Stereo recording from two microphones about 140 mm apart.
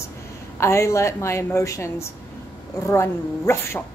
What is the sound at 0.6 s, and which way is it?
Speech, 20° left (ahead or behind).